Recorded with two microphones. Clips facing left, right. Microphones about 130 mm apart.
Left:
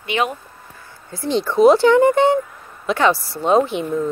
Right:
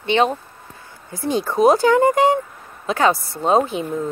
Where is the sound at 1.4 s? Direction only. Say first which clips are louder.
Left 3 dB; 45° right (ahead or behind).